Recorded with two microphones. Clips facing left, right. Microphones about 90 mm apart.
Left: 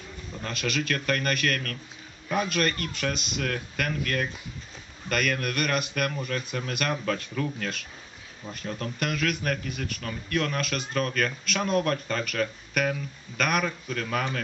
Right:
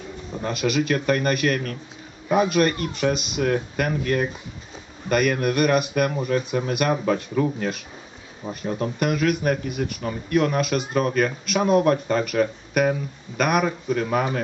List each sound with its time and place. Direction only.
0.5 s speech: 10° right (ahead or behind)